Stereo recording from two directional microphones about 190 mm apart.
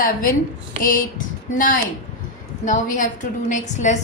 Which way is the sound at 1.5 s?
45° left (ahead or behind).